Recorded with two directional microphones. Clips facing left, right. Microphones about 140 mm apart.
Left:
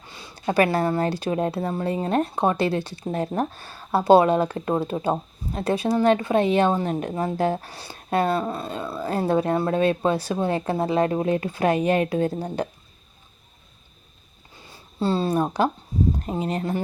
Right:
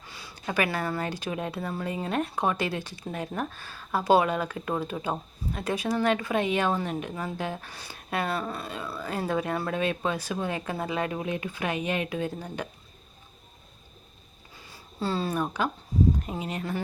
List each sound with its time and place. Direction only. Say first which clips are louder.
0.1 s a woman's voice: left 8 dB; 25° left (ahead or behind)
14.9 s a woman's voice: left 6 dB; 25° left (ahead or behind)